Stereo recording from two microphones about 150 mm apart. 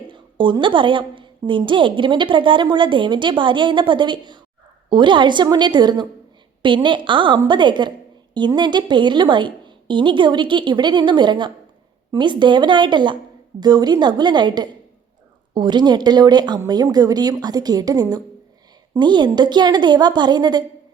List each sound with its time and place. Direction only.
0.1 s a woman's voice: 30° right (ahead or behind)